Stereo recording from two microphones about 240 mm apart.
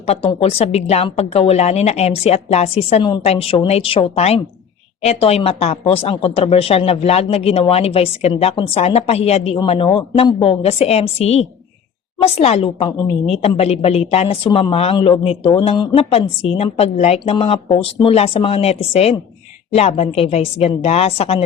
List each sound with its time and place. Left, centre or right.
0.0 s a woman's voice: left